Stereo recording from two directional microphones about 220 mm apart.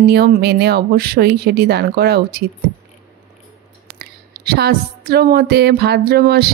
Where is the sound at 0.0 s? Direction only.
45° right (ahead or behind).